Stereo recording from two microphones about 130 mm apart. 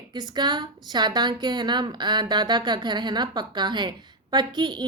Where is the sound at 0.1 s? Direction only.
35° right (ahead or behind).